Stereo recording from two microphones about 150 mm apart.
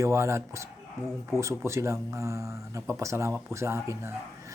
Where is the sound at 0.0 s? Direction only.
20° right (ahead or behind).